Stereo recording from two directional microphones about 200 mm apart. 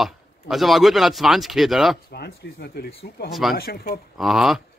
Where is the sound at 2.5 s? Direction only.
55° left (ahead or behind).